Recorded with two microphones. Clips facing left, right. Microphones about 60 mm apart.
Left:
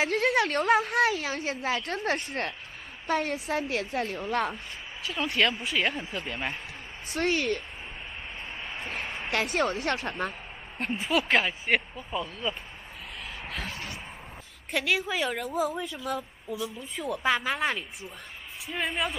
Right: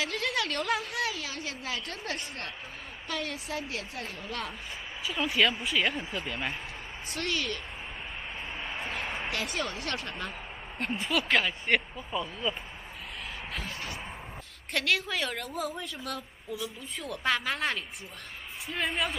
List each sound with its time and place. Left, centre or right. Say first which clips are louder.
0.0 s a woman's voice: left 6 dB; left
3.1 s a woman's voice: left 7 dB; left
5.0 s speech: even; centre
7.2 s a woman's voice: left 6 dB; left
9.0 s a sound: right 1 dB; centre
9.3 s a woman's voice: left 11 dB; left
10.8 s speech: left 3 dB; centre
14.7 s a woman's voice: left 2 dB; centre